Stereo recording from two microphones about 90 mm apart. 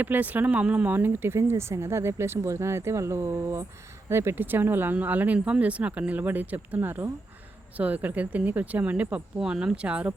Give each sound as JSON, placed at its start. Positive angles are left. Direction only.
{"t": 0.0, "sound": "speech", "side_deg": -20}